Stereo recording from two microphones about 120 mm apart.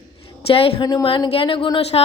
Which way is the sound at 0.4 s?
55° left (ahead or behind).